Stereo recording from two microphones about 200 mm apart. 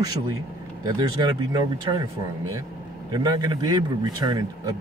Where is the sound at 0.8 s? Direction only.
20° right (ahead or behind).